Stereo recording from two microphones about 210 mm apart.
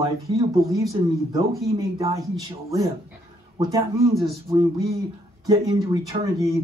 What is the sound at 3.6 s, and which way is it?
Speech, 15° right (ahead or behind).